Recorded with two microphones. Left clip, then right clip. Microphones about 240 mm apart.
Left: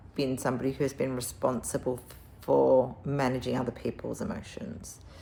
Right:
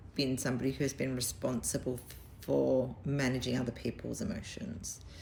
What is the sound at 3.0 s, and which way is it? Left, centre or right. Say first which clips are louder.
A woman's voice: left 5 dB; centre.